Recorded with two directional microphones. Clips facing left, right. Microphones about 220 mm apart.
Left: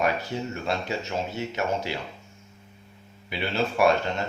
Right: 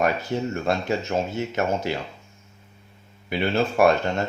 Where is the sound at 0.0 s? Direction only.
50° right (ahead or behind).